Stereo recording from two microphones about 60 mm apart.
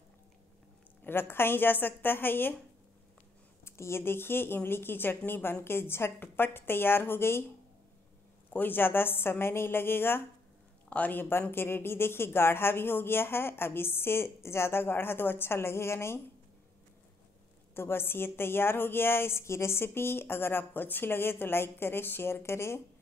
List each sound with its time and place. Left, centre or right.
1.0 s a woman's voice: left
3.6 s a woman's voice: left
8.5 s a woman's voice: left
10.9 s a woman's voice: left
17.7 s a woman's voice: left